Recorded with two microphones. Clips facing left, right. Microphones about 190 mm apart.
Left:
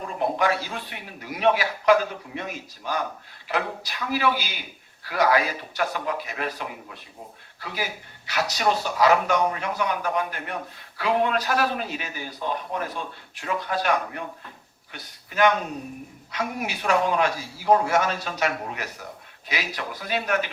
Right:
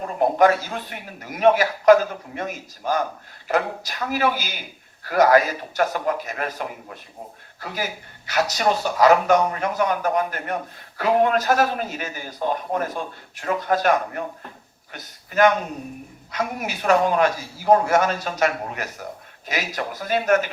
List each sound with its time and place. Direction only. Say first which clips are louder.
0.2 s a man's voice: right 7 dB; 45° right (ahead or behind)